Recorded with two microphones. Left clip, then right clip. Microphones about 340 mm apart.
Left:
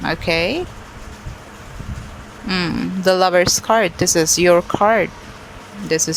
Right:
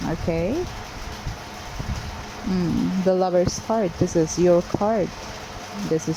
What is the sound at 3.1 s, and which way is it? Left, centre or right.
Speech, left.